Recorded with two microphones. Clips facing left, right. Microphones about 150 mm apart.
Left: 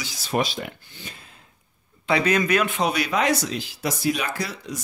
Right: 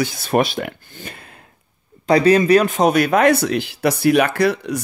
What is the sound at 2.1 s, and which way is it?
Speech, 35° right (ahead or behind).